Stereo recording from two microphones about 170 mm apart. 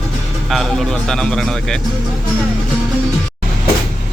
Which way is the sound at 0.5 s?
Centre (ahead or behind).